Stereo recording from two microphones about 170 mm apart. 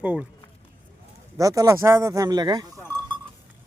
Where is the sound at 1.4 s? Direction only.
20° right (ahead or behind).